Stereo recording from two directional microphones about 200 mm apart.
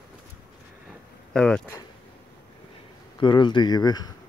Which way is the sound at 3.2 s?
25° left (ahead or behind).